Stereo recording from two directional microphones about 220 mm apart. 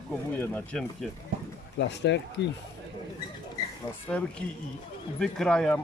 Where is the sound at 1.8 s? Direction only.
50° left (ahead or behind).